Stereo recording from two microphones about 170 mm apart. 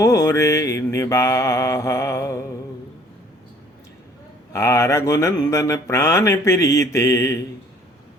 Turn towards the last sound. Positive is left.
turn(degrees=15)  # may be behind; listen again after turning